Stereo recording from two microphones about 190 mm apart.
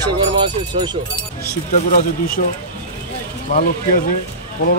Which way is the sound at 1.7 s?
45° left (ahead or behind).